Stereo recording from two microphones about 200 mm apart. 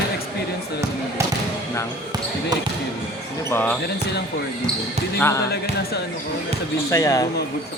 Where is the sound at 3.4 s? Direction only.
10° left (ahead or behind).